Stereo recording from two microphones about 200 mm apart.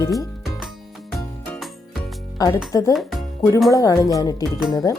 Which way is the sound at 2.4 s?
20° left (ahead or behind).